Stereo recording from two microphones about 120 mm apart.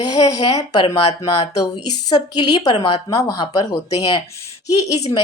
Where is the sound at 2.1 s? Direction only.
35° left (ahead or behind).